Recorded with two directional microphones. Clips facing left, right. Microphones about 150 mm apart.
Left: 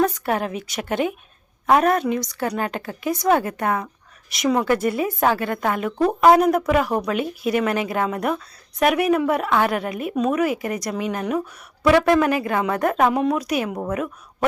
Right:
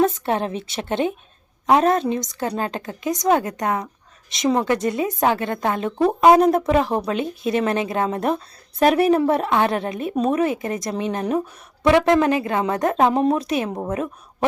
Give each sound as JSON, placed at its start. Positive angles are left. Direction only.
{"t": 0.0, "sound": "a woman's voice", "side_deg": -25}